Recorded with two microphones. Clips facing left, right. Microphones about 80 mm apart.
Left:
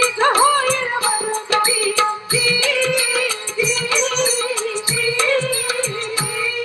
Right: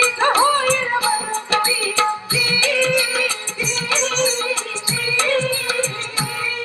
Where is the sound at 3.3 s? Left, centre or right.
Right.